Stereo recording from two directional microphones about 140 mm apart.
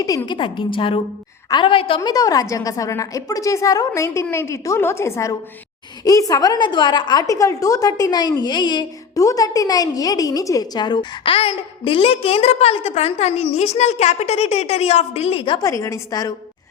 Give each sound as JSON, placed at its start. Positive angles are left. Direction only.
{"t": 0.3, "sound": "a woman's voice", "side_deg": 35}
{"t": 2.0, "sound": "a woman's voice", "side_deg": 25}
{"t": 15.6, "sound": "a woman's voice", "side_deg": 20}